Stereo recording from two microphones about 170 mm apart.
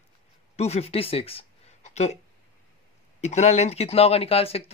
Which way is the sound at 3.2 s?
40° left (ahead or behind).